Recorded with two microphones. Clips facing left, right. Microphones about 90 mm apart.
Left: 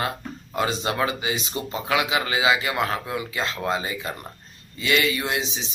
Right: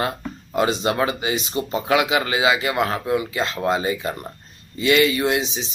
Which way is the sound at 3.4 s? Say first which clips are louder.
Right 4 dB; 30° right (ahead or behind).